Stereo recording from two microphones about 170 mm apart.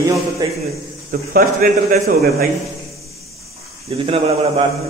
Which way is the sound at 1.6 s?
55° right (ahead or behind).